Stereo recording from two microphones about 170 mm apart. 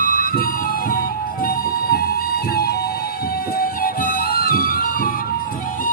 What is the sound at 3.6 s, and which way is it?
Music, 60° left (ahead or behind).